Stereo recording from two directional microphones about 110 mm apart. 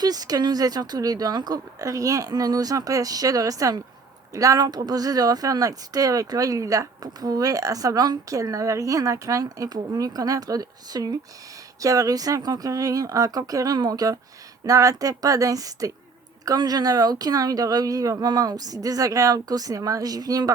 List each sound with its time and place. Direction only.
0.0 s speech: 35° right (ahead or behind)